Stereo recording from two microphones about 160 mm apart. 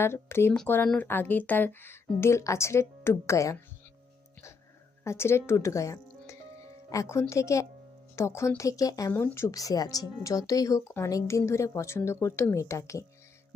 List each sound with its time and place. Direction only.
0.0 s speech: 15° left (ahead or behind)
5.0 s speech: 15° left (ahead or behind)